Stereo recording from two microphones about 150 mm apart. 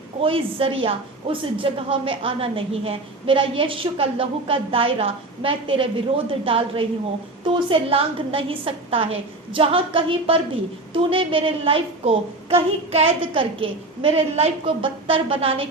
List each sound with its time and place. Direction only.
0.2 s a woman's voice: 35° right (ahead or behind)